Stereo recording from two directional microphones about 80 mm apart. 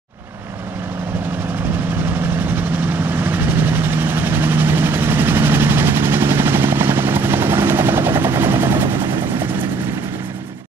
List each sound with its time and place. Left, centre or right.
2.0 s vehicle: right